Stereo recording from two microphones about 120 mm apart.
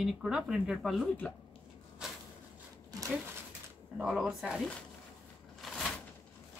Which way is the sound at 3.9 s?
5° right (ahead or behind).